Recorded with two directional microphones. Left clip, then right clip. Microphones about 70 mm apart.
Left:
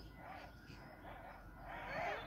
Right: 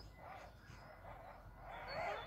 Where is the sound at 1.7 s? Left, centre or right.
Left.